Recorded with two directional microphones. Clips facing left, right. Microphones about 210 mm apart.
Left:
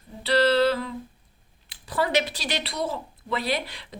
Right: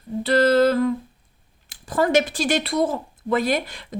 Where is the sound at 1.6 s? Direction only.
45° right (ahead or behind).